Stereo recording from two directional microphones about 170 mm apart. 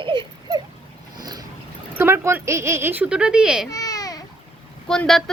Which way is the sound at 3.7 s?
20° left (ahead or behind).